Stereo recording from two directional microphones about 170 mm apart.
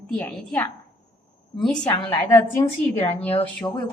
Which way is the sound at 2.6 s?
25° left (ahead or behind).